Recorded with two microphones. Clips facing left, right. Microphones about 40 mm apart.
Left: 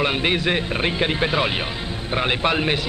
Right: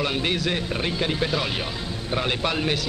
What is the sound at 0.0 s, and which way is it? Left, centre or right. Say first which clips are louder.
Speech: left 4 dB; left.